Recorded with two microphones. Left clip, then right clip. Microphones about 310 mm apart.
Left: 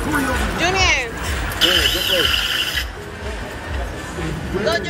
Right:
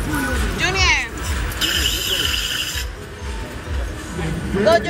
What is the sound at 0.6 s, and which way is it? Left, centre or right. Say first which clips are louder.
Music: even; centre.